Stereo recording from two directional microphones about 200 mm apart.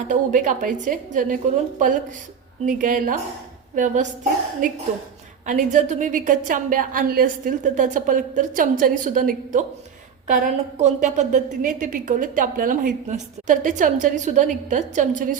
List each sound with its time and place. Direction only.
0.1 s a woman's voice: 40° right (ahead or behind)
2.6 s a woman's voice: 40° right (ahead or behind)